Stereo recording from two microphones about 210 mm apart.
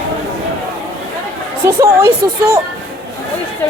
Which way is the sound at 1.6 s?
10° right (ahead or behind).